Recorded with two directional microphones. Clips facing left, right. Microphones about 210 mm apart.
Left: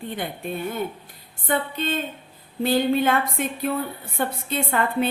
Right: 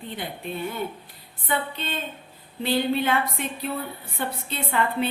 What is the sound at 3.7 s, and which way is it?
Speech, 60° left (ahead or behind).